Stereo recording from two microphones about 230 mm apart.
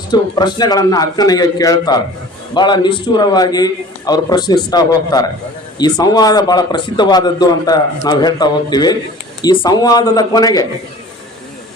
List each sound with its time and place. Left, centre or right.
0.1 s a man's voice: centre